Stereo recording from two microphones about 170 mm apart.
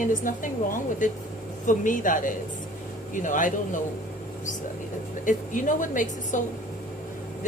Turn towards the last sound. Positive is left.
turn(degrees=50)  # may be behind; listen again after turning